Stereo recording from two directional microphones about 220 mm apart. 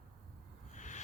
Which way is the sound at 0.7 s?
35° left (ahead or behind).